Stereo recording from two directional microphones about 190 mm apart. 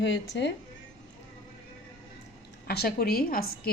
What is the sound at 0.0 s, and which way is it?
Speech, 70° left (ahead or behind).